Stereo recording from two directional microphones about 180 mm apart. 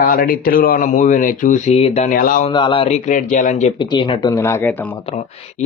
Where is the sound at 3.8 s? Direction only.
25° left (ahead or behind).